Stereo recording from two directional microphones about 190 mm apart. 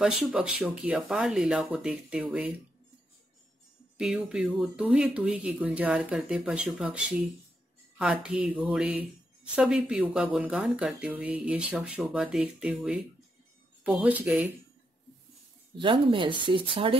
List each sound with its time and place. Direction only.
0.0 s speech: 5° right (ahead or behind)
4.0 s speech: 5° right (ahead or behind)
15.8 s speech: 25° right (ahead or behind)